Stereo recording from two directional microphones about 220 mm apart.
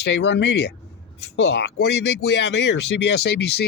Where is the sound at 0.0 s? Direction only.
50° left (ahead or behind).